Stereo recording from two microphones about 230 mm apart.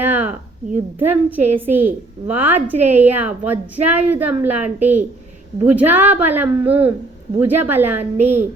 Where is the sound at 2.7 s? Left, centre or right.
Right.